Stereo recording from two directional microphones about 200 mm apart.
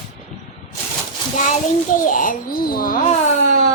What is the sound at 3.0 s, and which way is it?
Speech, 35° left (ahead or behind).